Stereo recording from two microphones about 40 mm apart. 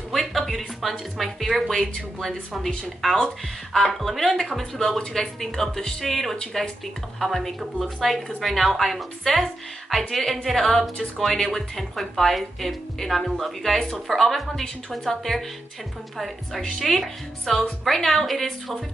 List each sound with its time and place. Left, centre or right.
0.1 s a woman's voice: centre
2.0 s a woman's voice: centre
6.3 s speech: left
7.2 s a woman's voice: centre